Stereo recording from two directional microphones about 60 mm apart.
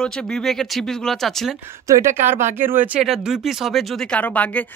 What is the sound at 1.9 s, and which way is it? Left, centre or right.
Speech, right.